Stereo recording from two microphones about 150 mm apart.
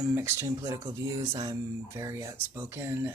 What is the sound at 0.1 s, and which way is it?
Speech, 15° right (ahead or behind).